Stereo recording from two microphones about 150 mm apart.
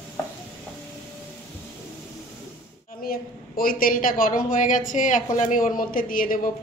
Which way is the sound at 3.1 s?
75° left (ahead or behind).